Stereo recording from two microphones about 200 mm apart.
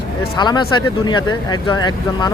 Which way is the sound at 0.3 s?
20° left (ahead or behind).